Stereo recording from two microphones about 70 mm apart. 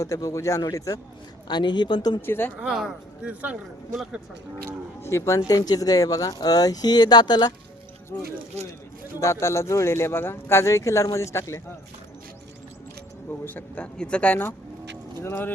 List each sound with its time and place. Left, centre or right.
0.0 s speech: left
1.5 s speech: left
2.2 s speech: left
2.6 s speech: centre
3.2 s a man's voice: centre
4.9 s speech: left
5.5 s speech: left
9.2 s speech: left
13.4 s speech: left